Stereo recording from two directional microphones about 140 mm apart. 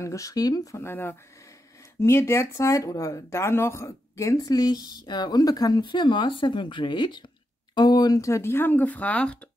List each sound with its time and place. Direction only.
0.0 s speech: 20° left (ahead or behind)